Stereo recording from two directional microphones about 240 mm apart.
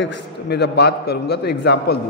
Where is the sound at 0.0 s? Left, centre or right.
Left.